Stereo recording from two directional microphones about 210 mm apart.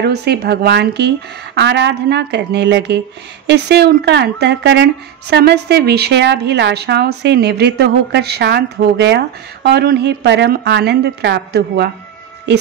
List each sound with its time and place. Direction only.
0.0 s a woman's voice: 50° right (ahead or behind)